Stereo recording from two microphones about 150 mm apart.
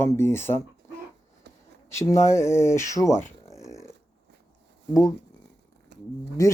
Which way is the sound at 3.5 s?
20° left (ahead or behind).